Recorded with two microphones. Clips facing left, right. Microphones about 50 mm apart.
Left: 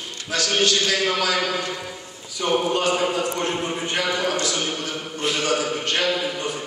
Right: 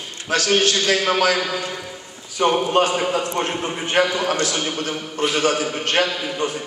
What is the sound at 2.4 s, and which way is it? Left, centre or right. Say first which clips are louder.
A man's voice: right 4 dB; right.